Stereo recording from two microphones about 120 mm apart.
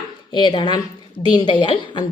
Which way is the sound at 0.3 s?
40° left (ahead or behind).